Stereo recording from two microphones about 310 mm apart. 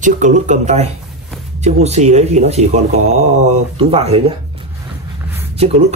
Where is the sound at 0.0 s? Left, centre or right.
Right.